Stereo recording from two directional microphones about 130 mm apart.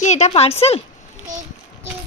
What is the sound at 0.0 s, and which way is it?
Speech, 60° left (ahead or behind).